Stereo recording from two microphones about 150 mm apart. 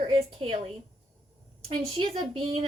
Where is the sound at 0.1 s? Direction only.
40° right (ahead or behind).